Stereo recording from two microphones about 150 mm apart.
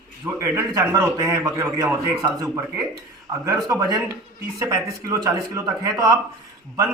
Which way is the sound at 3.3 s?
25° right (ahead or behind).